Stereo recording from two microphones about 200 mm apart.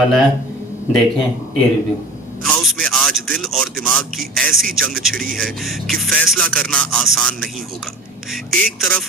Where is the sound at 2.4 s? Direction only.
Centre (ahead or behind).